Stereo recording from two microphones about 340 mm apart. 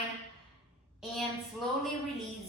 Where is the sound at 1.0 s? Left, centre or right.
Centre.